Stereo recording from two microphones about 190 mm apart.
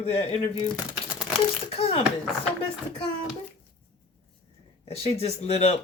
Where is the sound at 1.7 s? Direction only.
30° left (ahead or behind).